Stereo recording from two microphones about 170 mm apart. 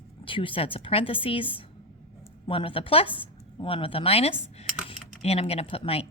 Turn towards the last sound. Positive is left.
turn(degrees=35)  # may be behind; listen again after turning